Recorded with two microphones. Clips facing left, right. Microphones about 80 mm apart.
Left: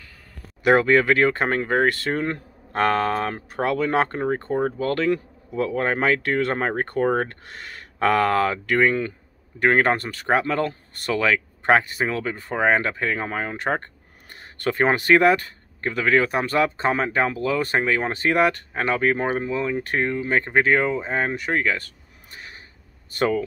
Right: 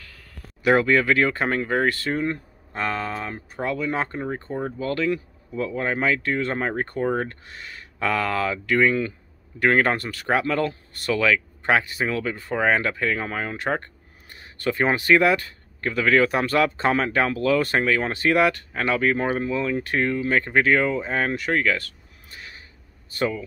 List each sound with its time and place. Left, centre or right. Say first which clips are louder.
0.7 s speech: left 2 dB; left
14.3 s speech: left 1 dB; left
19.8 s speech: even; left